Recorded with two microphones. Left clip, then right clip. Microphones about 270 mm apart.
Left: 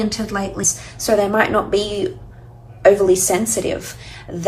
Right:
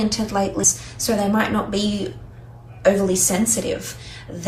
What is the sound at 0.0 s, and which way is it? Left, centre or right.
Speech, centre.